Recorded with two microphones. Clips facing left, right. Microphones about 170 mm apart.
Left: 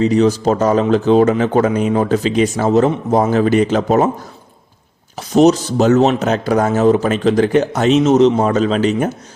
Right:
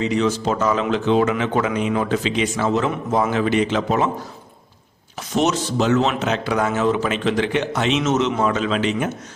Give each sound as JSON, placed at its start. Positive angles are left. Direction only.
{"t": 0.0, "sound": "speech", "side_deg": 40}
{"t": 5.1, "sound": "speech", "side_deg": 35}